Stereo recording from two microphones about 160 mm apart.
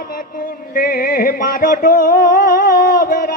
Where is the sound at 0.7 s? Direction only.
65° left (ahead or behind).